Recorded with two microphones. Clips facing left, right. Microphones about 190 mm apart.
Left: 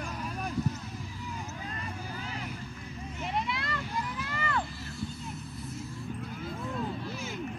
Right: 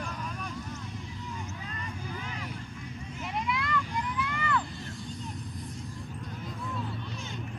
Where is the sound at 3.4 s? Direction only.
35° left (ahead or behind).